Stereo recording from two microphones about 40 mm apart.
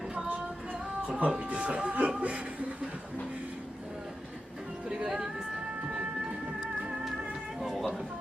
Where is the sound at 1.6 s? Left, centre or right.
Right.